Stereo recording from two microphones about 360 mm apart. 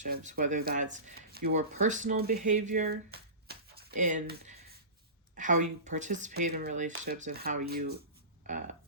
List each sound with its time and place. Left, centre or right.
0.0 s speech: right